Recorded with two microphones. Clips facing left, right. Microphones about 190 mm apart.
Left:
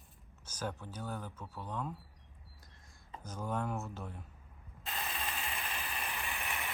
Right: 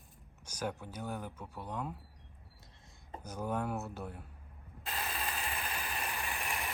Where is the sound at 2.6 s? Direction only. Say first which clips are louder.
Right 2 dB; 25° right (ahead or behind).